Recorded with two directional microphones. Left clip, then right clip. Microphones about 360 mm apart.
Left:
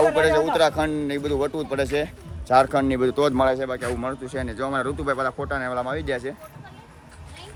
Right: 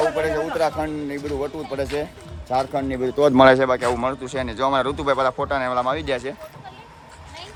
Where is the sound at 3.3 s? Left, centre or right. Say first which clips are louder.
Right 8 dB; right.